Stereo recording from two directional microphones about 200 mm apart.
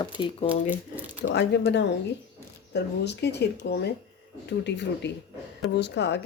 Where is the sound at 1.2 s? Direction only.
60° left (ahead or behind).